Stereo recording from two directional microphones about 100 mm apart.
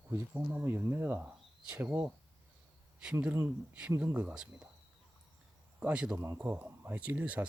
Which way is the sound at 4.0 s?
15° right (ahead or behind).